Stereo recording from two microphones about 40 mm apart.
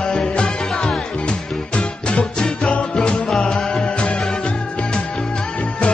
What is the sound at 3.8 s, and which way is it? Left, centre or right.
Music, left.